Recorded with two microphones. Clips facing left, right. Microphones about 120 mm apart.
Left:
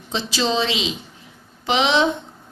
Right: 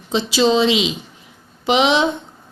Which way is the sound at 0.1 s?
15° right (ahead or behind).